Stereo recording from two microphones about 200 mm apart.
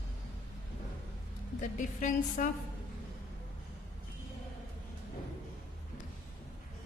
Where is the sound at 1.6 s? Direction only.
40° left (ahead or behind).